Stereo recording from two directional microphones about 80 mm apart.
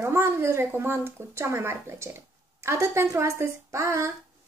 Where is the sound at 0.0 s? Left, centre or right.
Right.